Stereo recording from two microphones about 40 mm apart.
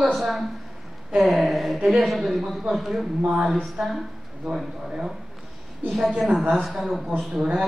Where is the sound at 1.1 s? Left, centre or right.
Centre.